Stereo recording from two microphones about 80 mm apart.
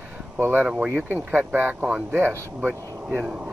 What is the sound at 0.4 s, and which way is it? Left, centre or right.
Speech, right.